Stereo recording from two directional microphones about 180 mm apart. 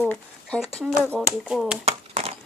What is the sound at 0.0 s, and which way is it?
Speech, 10° left (ahead or behind).